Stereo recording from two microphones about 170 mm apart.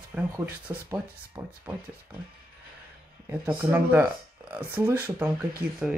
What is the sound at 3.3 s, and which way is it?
Speech, 10° right (ahead or behind).